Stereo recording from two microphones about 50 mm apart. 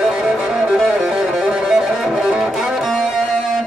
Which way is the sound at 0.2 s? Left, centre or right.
Centre.